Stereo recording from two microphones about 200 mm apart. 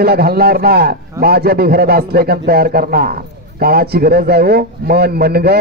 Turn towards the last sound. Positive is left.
turn(degrees=-50)  # may be behind; listen again after turning